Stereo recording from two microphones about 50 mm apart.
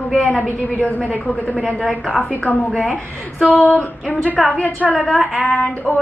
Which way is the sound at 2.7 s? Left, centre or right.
Left.